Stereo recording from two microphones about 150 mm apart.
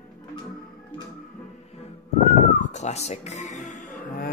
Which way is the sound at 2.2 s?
55° left (ahead or behind).